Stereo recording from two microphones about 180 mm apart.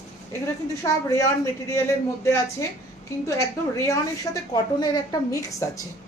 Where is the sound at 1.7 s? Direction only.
15° left (ahead or behind).